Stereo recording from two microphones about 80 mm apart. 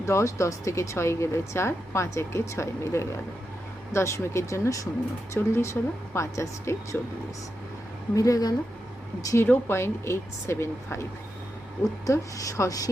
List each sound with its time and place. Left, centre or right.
0.0 s speech: left
8.1 s a woman's voice: left
9.2 s speech: left
12.0 s a woman's voice: left